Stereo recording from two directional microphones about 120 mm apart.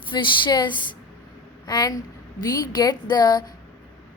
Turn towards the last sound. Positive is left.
turn(degrees=35)  # may be behind; listen again after turning